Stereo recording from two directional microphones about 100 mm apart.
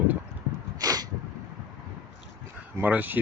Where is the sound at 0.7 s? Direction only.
40° right (ahead or behind).